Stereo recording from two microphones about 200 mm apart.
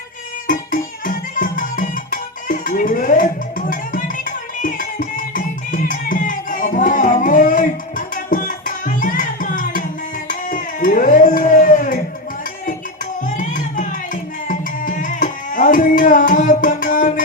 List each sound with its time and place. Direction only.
0.4 s music: 40° left (ahead or behind)
10.2 s a sound: 40° left (ahead or behind)
13.2 s music: 40° left (ahead or behind)